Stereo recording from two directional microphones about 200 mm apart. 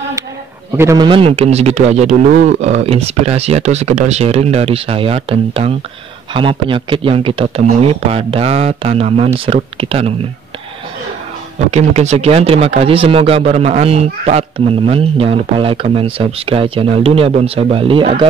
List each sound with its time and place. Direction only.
0.7 s a man's voice: 15° right (ahead or behind)
11.7 s a man's voice: 35° right (ahead or behind)